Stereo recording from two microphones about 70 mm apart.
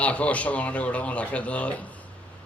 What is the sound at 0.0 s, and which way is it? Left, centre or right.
A man's voice, centre.